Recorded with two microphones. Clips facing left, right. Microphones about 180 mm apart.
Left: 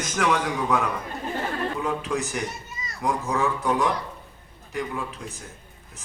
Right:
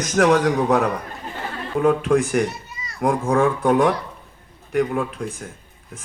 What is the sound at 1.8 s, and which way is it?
Speech, 50° right (ahead or behind).